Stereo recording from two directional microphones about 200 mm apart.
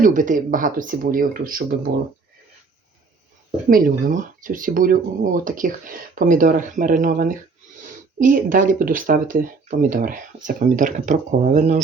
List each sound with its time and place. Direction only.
0.0 s speech: 40° right (ahead or behind)
3.7 s speech: 45° right (ahead or behind)